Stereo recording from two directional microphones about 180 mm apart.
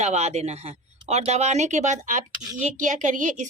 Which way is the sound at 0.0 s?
40° right (ahead or behind).